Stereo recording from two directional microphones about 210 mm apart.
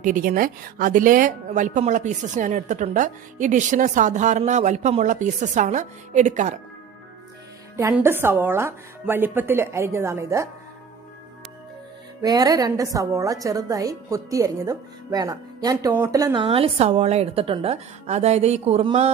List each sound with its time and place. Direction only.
0.0 s a woman's voice: 40° right (ahead or behind)
7.7 s a woman's voice: 10° right (ahead or behind)
12.2 s a woman's voice: 20° right (ahead or behind)